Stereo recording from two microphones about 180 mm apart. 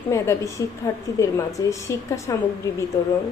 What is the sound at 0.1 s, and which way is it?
A woman's voice, 15° left (ahead or behind).